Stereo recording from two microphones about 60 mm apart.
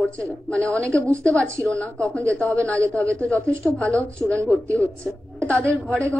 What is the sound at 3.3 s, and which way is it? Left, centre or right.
Speech, right.